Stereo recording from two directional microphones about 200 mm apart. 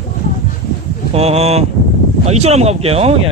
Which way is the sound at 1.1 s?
30° right (ahead or behind).